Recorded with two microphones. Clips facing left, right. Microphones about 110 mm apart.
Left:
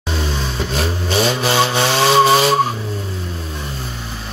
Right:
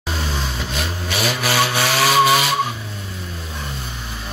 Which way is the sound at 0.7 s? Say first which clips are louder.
Left 7 dB; 30° left (ahead or behind).